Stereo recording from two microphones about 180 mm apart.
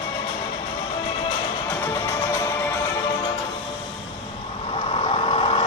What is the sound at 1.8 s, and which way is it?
Music, 10° left (ahead or behind).